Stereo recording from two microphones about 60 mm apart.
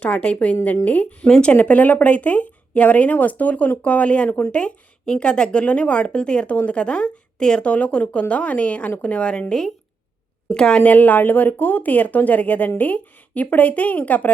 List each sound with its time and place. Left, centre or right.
0.0 s speech: left
1.3 s a woman's voice: centre